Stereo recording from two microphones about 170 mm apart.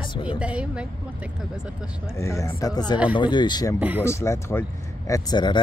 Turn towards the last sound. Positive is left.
turn(degrees=25)  # may be behind; listen again after turning